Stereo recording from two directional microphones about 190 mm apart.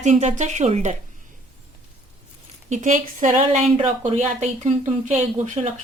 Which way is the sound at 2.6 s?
40° right (ahead or behind).